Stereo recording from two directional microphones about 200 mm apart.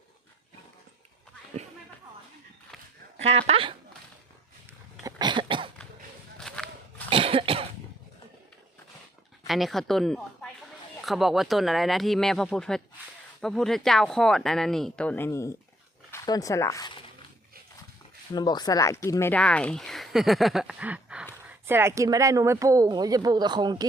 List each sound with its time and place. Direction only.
3.2 s speech: 30° right (ahead or behind)
5.0 s cough: 20° right (ahead or behind)
6.6 s pig: 5° left (ahead or behind)
7.1 s cough: 25° right (ahead or behind)
9.5 s a woman's voice: centre (ahead or behind); by 16.9 s 15° left (ahead or behind)
18.3 s speech: 20° left (ahead or behind); by 23.8 s 20° right (ahead or behind)